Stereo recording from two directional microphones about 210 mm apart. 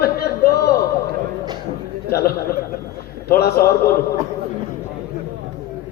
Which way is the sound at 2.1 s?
45° left (ahead or behind).